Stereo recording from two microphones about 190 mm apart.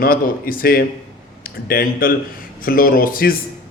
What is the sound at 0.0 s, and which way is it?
Speech, 50° left (ahead or behind).